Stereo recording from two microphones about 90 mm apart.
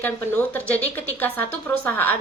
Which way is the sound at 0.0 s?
20° left (ahead or behind).